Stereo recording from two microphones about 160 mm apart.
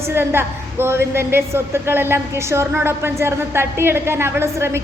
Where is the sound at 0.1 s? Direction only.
15° right (ahead or behind).